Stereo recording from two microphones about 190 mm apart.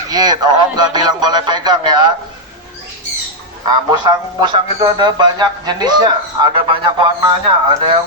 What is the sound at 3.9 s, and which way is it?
Speech, 25° right (ahead or behind).